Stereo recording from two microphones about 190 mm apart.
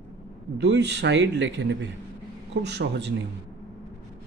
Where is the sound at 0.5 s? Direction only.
70° right (ahead or behind).